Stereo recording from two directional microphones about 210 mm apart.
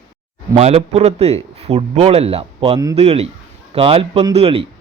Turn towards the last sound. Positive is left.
turn(degrees=-25)  # may be behind; listen again after turning